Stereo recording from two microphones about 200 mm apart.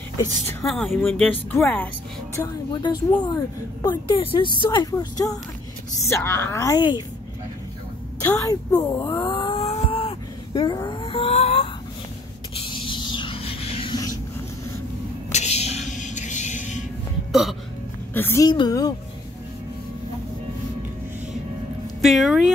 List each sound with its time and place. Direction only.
0.6 s a woman's voice: centre (ahead or behind); by 7.0 s 20° left (ahead or behind)
8.3 s a sound: 15° left (ahead or behind)
15.3 s music: 35° left (ahead or behind)
17.3 s hiccup: centre (ahead or behind)
18.1 s a woman's voice: 10° left (ahead or behind)
22.0 s a woman's voice: centre (ahead or behind)